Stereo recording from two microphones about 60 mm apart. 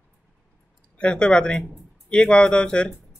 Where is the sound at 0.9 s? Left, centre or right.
Centre.